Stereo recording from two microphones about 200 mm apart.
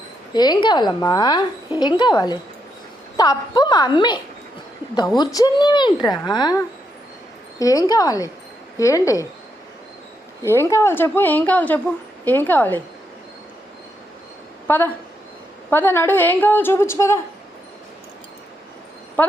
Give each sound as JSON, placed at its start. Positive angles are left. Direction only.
{"t": 0.3, "sound": "a woman's voice", "side_deg": 20}
{"t": 7.6, "sound": "a woman's voice", "side_deg": 15}
{"t": 10.4, "sound": "a woman's voice", "side_deg": 15}
{"t": 14.7, "sound": "a woman's voice", "side_deg": 10}